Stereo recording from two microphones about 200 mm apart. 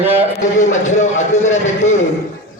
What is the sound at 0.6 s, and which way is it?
A man's voice, 35° left (ahead or behind).